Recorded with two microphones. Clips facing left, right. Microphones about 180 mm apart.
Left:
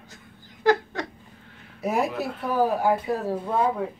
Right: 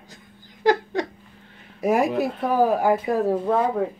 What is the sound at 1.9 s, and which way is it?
Speech, 50° right (ahead or behind).